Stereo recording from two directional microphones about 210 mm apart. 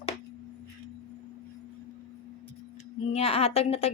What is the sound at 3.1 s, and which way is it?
Speech, 30° left (ahead or behind).